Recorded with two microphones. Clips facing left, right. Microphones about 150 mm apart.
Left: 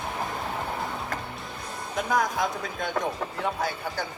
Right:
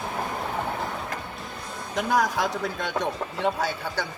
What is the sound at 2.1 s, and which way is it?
Speech, 90° right.